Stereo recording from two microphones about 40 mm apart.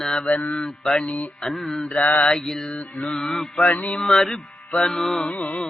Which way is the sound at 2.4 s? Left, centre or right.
Centre.